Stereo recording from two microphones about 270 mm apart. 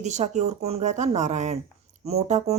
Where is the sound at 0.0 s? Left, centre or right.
Right.